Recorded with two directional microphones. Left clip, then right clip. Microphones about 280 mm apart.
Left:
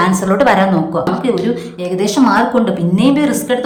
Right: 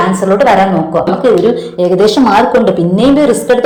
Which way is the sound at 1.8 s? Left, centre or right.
Centre.